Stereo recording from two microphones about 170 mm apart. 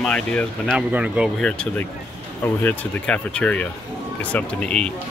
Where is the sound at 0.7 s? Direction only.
5° right (ahead or behind).